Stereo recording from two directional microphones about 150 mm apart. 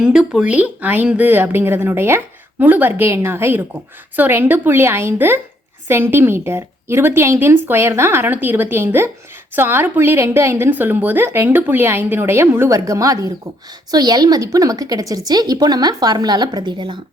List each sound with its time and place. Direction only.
0.0 s a woman's voice: 5° right (ahead or behind); by 17.0 s 30° right (ahead or behind)